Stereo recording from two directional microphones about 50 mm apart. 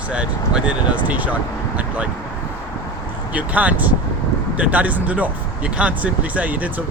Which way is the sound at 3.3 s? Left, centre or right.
Right.